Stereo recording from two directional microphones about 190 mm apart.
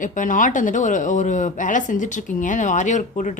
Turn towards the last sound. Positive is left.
turn(degrees=40)  # may be behind; listen again after turning